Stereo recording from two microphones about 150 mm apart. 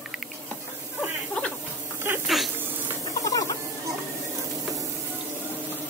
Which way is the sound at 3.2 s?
20° left (ahead or behind).